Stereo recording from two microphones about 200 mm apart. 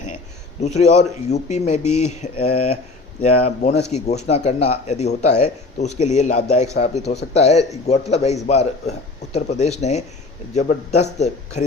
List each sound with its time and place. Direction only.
0.6 s speech: 35° left (ahead or behind)